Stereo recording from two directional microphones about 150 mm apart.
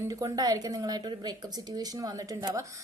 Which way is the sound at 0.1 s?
25° right (ahead or behind).